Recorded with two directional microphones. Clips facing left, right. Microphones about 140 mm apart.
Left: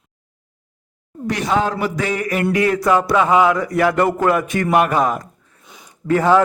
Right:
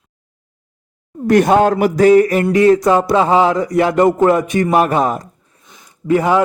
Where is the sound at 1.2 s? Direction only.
50° right (ahead or behind); by 2.4 s 35° right (ahead or behind).